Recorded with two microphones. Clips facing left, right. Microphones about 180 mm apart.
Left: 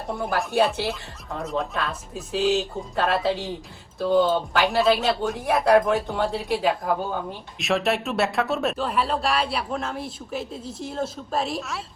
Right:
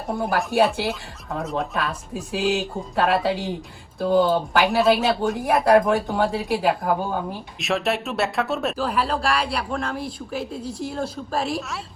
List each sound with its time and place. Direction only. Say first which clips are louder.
0.1 s speech: right 2 dB; centre (ahead or behind)